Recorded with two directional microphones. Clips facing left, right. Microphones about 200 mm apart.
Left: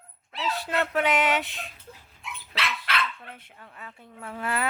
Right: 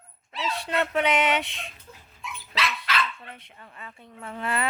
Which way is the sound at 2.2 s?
60° left (ahead or behind).